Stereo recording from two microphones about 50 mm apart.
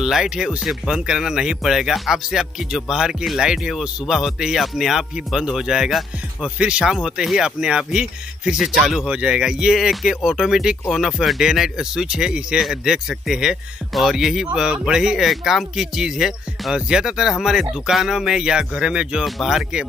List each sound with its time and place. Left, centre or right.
0.0 s speech: centre
9.0 s speech: centre
19.2 s speech: centre